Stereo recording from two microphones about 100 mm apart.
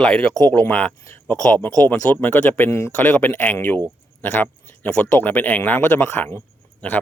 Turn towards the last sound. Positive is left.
turn(degrees=15)  # may be behind; listen again after turning